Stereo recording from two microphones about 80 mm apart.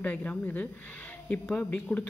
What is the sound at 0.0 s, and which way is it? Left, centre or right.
A woman's voice, centre.